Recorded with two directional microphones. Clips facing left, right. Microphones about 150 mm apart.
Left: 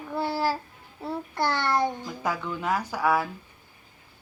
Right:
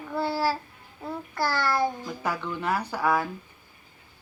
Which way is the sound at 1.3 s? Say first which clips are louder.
Even; 25° left (ahead or behind).